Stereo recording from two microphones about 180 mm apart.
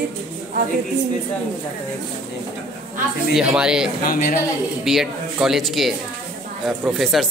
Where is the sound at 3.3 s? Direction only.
5° right (ahead or behind).